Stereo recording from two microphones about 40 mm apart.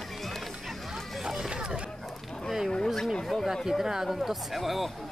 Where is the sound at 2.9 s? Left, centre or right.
Centre.